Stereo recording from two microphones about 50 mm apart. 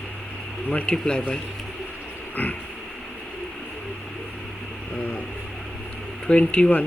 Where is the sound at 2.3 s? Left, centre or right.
Left.